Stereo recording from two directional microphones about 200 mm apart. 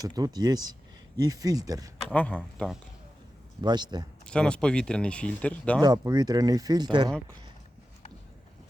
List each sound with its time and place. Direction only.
0.0 s speech: 20° right (ahead or behind)
2.0 s speech: 5° left (ahead or behind)
3.6 s speech: 20° right (ahead or behind)
4.3 s speech: 5° left (ahead or behind)
5.8 s speech: 20° right (ahead or behind)